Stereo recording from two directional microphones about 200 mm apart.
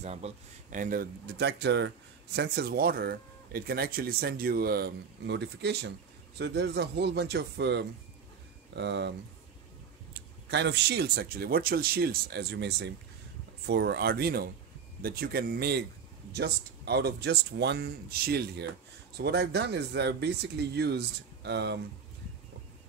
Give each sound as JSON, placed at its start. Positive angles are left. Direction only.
{"t": 0.0, "sound": "speech", "side_deg": -35}
{"t": 10.1, "sound": "speech", "side_deg": -60}